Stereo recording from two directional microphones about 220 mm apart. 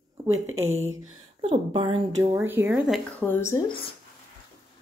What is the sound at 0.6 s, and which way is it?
Speech, 30° right (ahead or behind).